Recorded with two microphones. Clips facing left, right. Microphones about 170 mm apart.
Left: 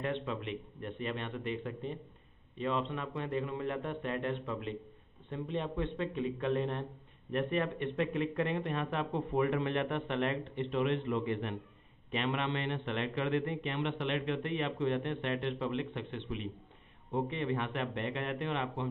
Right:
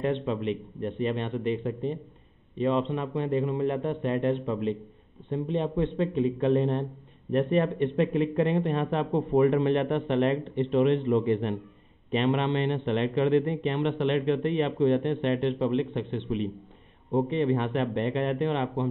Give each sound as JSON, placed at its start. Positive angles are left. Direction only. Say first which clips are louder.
{"t": 0.0, "sound": "a man's voice", "louder": "right 8 dB", "side_deg": -25}